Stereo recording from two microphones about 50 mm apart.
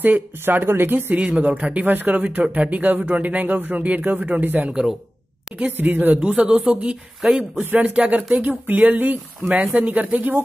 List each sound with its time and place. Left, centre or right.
0.0 s speech: right
1.1 s speech: right
4.6 s speech: centre
5.7 s speech: right
6.2 s speech: right